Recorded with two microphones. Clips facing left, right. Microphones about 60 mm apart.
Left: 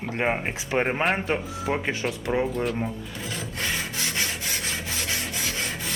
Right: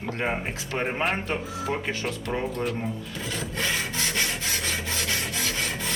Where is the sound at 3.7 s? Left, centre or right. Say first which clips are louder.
Even; centre.